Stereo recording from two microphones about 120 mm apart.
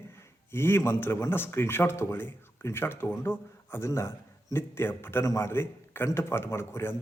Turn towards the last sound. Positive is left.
turn(degrees=20)  # may be behind; listen again after turning